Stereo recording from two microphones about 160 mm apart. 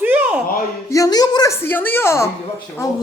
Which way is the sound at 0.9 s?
25° left (ahead or behind).